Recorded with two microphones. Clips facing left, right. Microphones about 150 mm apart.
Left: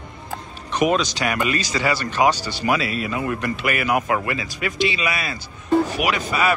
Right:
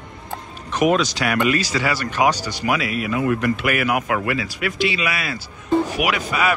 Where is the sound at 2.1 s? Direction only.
10° right (ahead or behind).